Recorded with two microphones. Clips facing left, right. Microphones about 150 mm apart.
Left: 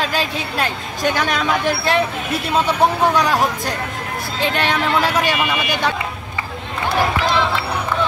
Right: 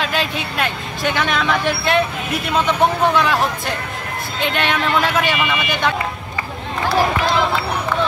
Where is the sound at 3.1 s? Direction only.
40° left (ahead or behind).